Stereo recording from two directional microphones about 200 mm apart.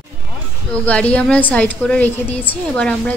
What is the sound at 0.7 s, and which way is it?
A woman's voice, 5° left (ahead or behind).